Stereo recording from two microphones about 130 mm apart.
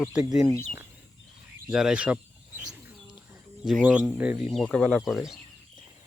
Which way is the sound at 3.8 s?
5° right (ahead or behind).